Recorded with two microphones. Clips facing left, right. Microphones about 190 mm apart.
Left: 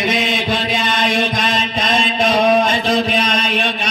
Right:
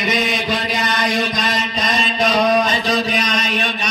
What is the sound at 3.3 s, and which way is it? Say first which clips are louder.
Mantra: left 2 dB; 30° left (ahead or behind).